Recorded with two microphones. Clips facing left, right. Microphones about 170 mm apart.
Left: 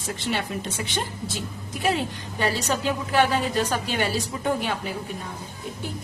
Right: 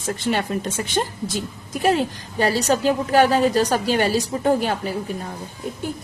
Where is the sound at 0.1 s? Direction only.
45° right (ahead or behind).